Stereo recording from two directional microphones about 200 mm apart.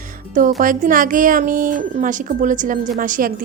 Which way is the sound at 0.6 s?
40° right (ahead or behind).